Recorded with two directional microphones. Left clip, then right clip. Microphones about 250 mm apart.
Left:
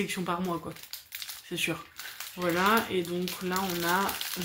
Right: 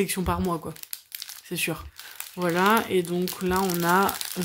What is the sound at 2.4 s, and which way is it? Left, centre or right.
Speech, right.